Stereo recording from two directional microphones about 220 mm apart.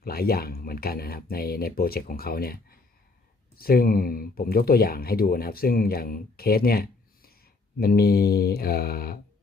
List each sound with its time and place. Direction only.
0.0 s speech: 45° left (ahead or behind)